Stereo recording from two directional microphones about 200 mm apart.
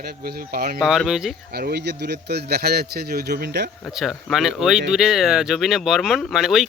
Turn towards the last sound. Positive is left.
turn(degrees=0)  # may be behind; listen again after turning